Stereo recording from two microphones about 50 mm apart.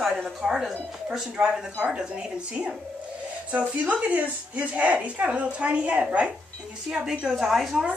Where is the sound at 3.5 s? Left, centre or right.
Right; by 7.7 s centre.